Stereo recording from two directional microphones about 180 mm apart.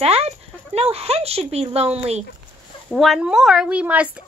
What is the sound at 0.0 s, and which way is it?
Speech, 35° right (ahead or behind).